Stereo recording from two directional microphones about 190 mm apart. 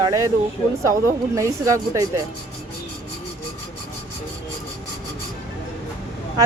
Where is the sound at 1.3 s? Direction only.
15° right (ahead or behind).